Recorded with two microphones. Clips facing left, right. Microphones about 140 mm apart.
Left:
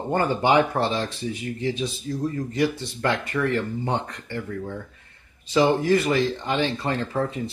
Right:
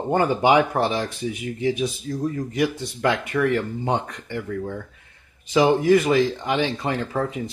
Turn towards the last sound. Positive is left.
turn(degrees=-15)  # may be behind; listen again after turning